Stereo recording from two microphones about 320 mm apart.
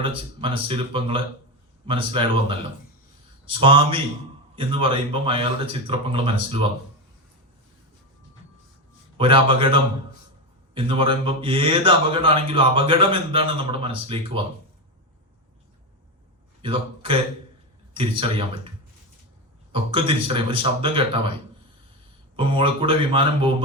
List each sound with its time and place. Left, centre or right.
0.0 s a man's voice: centre
9.1 s a man's voice: centre
16.6 s a man's voice: centre
19.7 s a man's voice: centre
22.4 s a man's voice: centre